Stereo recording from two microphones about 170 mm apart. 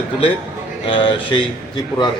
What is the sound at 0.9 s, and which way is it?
A man's voice, 30° left (ahead or behind).